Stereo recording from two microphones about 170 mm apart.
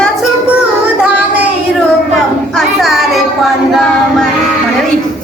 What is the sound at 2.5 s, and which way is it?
Child singing, centre (ahead or behind).